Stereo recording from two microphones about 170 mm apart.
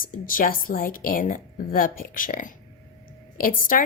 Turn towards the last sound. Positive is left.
turn(degrees=55)  # may be behind; listen again after turning